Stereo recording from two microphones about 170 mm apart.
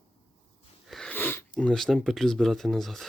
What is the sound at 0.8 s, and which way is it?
Speech, centre (ahead or behind).